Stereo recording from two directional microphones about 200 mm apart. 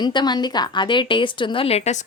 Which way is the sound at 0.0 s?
20° left (ahead or behind).